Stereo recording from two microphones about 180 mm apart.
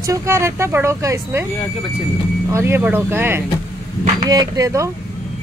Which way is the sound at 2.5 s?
15° right (ahead or behind).